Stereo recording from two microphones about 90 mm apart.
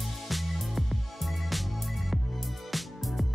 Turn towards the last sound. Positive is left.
turn(degrees=0)  # may be behind; listen again after turning